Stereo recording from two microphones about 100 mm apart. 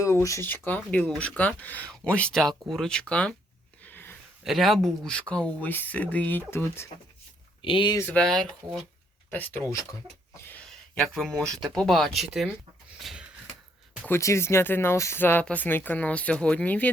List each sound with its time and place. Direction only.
0.0 s speech: 30° left (ahead or behind)
0.4 s speech: 20° left (ahead or behind)
3.8 s a sound: 20° left (ahead or behind)
4.4 s speech: centre (ahead or behind); by 6.9 s 25° left (ahead or behind)
7.6 s speech: 55° left (ahead or behind)
8.0 s speech: 10° left (ahead or behind)
9.3 s speech: 15° left (ahead or behind)
11.1 s speech: centre (ahead or behind)
13.0 s a sound: centre (ahead or behind)
14.1 s speech: 30° left (ahead or behind)